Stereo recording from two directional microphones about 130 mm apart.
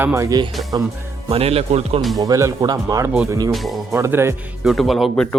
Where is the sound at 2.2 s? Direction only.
25° right (ahead or behind).